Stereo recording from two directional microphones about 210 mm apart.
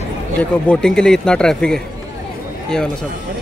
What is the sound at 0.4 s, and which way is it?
Speech, 5° left (ahead or behind).